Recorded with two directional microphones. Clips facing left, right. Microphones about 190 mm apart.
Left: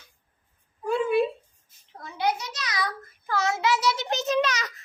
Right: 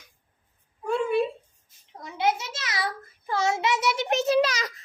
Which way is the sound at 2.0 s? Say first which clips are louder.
Right 1 dB; 20° right (ahead or behind).